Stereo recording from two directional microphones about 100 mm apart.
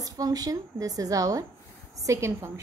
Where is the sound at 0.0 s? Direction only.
35° right (ahead or behind).